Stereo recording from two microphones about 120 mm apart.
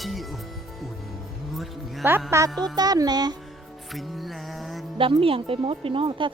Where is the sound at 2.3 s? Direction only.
25° right (ahead or behind).